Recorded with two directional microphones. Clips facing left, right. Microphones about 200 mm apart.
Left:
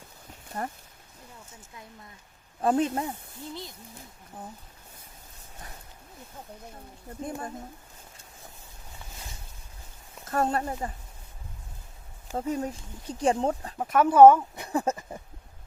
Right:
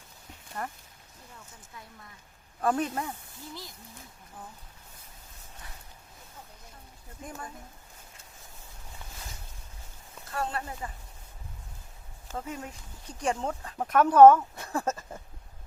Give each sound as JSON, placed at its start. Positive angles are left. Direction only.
{"t": 0.6, "sound": "speech", "side_deg": 30}
{"t": 2.6, "sound": "speech", "side_deg": 25}
{"t": 7.3, "sound": "speech", "side_deg": 30}
{"t": 10.3, "sound": "speech", "side_deg": 45}
{"t": 12.4, "sound": "speech", "side_deg": 35}
{"t": 13.7, "sound": "speech", "side_deg": 5}